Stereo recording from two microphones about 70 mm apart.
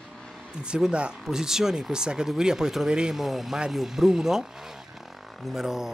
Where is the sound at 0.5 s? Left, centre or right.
Centre.